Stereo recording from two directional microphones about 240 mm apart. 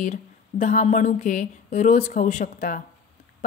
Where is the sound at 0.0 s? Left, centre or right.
Left.